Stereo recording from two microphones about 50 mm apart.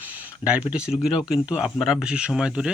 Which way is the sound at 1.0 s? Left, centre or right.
Centre.